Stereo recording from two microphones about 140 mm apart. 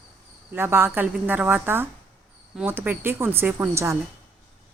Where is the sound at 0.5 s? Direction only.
15° right (ahead or behind).